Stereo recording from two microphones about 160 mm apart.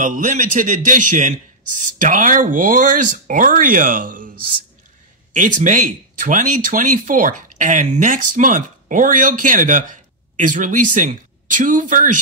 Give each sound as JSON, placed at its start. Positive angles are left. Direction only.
{"t": 0.0, "sound": "speech", "side_deg": -55}
{"t": 5.3, "sound": "speech", "side_deg": -55}